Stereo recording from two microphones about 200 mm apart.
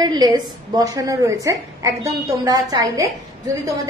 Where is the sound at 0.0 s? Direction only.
20° right (ahead or behind).